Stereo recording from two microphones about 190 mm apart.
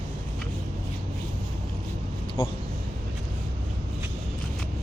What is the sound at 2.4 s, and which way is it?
Vehicle, 30° left (ahead or behind).